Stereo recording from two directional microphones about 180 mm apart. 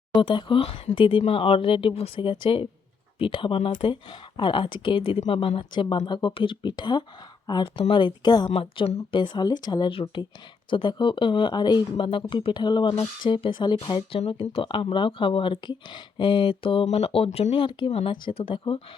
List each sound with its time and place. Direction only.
0.2 s speech: 30° left (ahead or behind)